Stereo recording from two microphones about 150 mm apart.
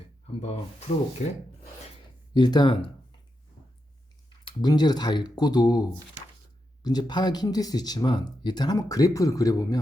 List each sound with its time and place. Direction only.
0.4 s speech: 45° left (ahead or behind)
2.3 s speech: 30° left (ahead or behind)
4.4 s speech: 30° left (ahead or behind)
6.8 s speech: 30° left (ahead or behind)